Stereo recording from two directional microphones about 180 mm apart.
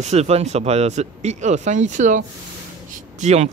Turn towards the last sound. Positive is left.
turn(degrees=-40)  # may be behind; listen again after turning